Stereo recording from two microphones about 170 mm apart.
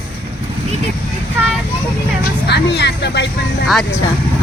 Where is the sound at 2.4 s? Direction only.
80° left.